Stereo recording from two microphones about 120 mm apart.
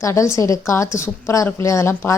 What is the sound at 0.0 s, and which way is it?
A woman's voice, 25° left (ahead or behind).